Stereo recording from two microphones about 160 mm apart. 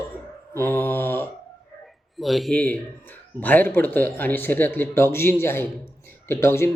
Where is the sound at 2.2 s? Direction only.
Centre (ahead or behind); by 6.6 s 15° left (ahead or behind).